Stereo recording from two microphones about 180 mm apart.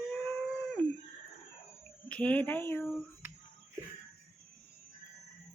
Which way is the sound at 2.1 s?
10° left (ahead or behind).